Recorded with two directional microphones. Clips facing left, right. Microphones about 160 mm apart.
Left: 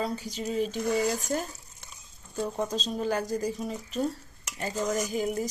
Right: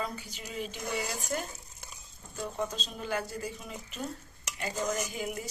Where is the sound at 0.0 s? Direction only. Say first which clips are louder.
Left 7 dB; 35° left (ahead or behind).